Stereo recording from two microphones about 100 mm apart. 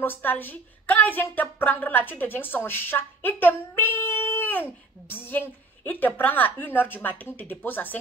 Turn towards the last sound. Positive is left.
turn(degrees=20)  # may be behind; listen again after turning